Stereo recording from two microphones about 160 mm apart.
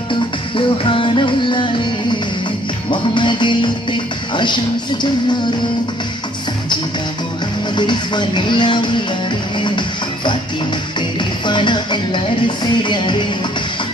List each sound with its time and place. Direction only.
0.1 s music: 30° left (ahead or behind)
2.9 s music: 30° left (ahead or behind)
7.7 s music: 30° left (ahead or behind)
11.4 s music: 30° left (ahead or behind)